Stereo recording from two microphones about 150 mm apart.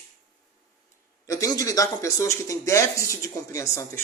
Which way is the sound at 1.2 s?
20° left (ahead or behind).